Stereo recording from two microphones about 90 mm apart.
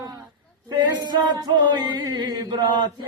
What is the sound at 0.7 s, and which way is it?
Male singing, 55° right (ahead or behind).